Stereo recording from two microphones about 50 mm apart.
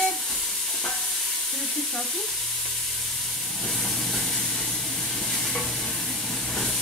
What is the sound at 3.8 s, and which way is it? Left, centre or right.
Vehicle, centre.